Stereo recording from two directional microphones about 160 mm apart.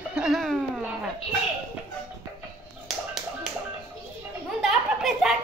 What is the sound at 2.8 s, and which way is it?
Music, centre (ahead or behind).